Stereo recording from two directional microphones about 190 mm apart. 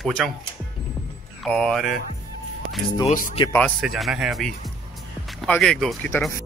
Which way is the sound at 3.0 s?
40° left (ahead or behind).